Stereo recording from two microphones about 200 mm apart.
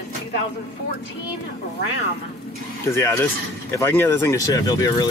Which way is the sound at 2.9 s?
15° left (ahead or behind).